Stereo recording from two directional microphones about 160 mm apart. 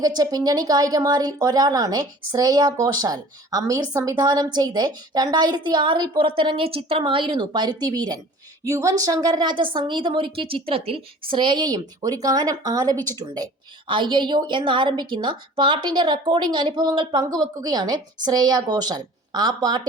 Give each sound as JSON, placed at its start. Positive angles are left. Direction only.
{"t": 0.0, "sound": "speech", "side_deg": -25}